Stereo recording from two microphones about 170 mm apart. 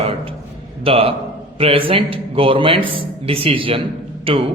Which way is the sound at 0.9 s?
35° right (ahead or behind).